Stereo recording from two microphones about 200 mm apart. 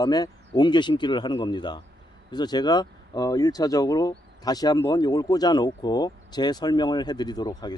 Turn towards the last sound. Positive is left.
turn(degrees=20)  # may be behind; listen again after turning